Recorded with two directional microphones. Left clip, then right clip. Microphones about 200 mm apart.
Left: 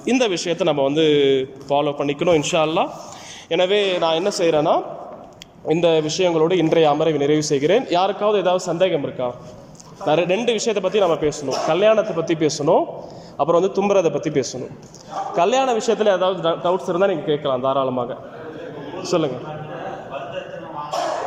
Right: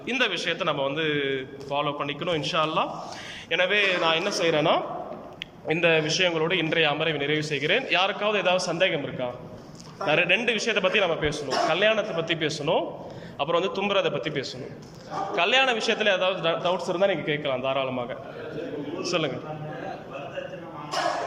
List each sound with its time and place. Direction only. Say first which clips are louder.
0.0 s a man's voice: left 6 dB; 25° left (ahead or behind)
19.0 s a man's voice: left 7 dB; 20° left (ahead or behind)